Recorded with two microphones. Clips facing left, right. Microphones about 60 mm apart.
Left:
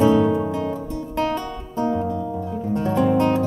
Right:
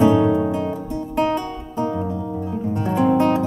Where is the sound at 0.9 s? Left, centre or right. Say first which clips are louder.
Right 3 dB; right.